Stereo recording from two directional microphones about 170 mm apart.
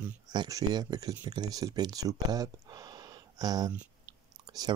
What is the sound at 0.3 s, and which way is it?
Speech, 25° right (ahead or behind).